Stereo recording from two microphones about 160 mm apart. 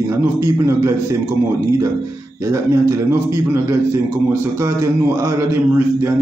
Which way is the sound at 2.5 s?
20° right (ahead or behind).